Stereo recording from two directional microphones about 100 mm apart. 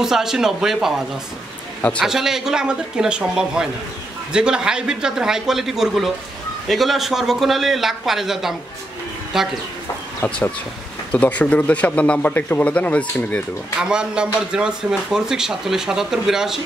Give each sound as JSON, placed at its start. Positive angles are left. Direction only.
{"t": 0.0, "sound": "a man's voice", "side_deg": -5}
{"t": 2.0, "sound": "a man's voice", "side_deg": -5}
{"t": 10.2, "sound": "speech", "side_deg": 20}
{"t": 13.7, "sound": "a man's voice", "side_deg": -10}